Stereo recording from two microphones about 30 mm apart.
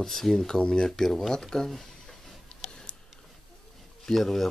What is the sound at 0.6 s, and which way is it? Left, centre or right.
Speech, left.